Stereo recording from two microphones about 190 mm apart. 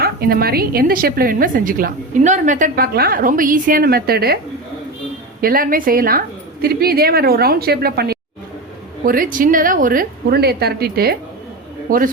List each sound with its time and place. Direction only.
0.0 s a woman's voice: 50° right (ahead or behind)
5.4 s a woman's voice: 50° right (ahead or behind)